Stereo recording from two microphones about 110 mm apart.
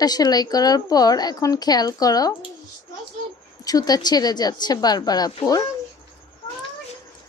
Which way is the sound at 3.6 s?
35° left (ahead or behind).